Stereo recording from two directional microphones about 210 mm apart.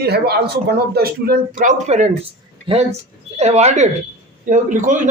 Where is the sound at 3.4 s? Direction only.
30° right (ahead or behind).